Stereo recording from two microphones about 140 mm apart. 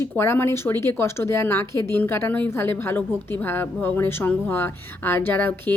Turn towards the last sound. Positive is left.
turn(degrees=15)  # may be behind; listen again after turning